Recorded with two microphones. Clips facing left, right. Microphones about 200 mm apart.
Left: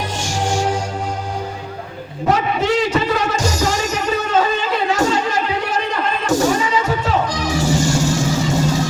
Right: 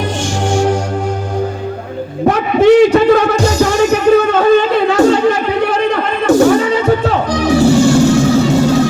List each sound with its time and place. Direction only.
0.5 s music: 50° right (ahead or behind)
2.3 s music: 55° right (ahead or behind)